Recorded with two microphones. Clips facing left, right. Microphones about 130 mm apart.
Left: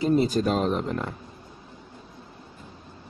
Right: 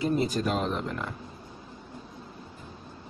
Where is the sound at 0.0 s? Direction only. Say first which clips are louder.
Left 5 dB; 30° left (ahead or behind).